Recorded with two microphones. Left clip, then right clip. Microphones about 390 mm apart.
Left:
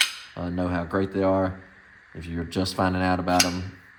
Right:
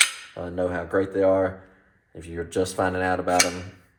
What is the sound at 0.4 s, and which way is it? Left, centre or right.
Speech, left.